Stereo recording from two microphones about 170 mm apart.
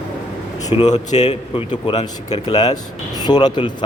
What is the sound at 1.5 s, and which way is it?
A man's voice, 30° left (ahead or behind).